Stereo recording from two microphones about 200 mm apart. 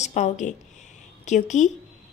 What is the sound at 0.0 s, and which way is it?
A woman's voice, 35° left (ahead or behind).